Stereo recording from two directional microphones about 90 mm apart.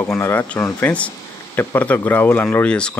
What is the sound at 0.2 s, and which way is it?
Speech, 30° left (ahead or behind).